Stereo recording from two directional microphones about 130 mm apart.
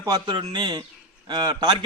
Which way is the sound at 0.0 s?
30° right (ahead or behind).